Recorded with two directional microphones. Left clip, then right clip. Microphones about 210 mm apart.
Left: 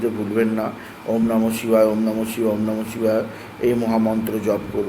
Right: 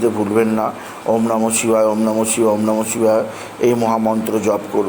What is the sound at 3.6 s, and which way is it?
A man's voice, 5° right (ahead or behind).